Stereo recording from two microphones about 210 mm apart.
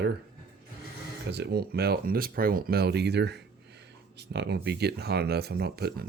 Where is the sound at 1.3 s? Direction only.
50° right (ahead or behind).